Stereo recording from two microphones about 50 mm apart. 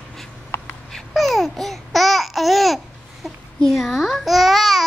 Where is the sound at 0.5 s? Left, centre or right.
Left.